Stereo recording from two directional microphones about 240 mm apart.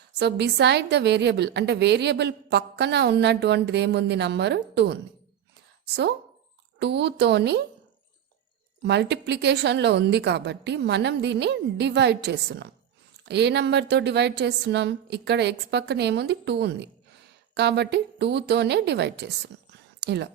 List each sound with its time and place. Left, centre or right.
0.2 s a woman's voice: right
8.8 s a woman's voice: right
19.7 s a sound: right